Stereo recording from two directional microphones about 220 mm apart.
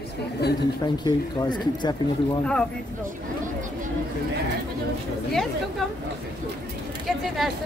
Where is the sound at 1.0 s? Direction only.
20° left (ahead or behind).